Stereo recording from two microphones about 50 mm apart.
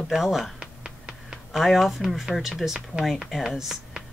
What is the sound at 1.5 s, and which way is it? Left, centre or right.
Speech, centre.